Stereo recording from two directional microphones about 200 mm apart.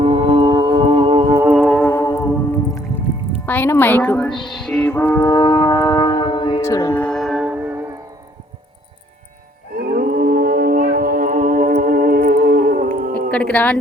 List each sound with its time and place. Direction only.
0.0 s music: 25° right (ahead or behind)
1.5 s music: 5° left (ahead or behind)
3.4 s a woman's voice: 10° left (ahead or behind)
4.4 s foghorn: centre (ahead or behind)
9.9 s a sound: 45° right (ahead or behind)
13.3 s speech: 5° left (ahead or behind)